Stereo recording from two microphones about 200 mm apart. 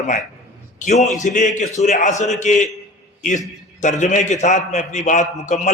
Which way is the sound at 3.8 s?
35° left (ahead or behind).